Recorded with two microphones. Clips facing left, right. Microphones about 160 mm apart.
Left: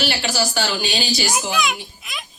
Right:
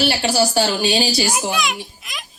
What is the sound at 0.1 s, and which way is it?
Speech, 30° right (ahead or behind).